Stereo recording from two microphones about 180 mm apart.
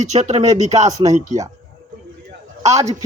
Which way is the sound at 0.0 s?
40° right (ahead or behind).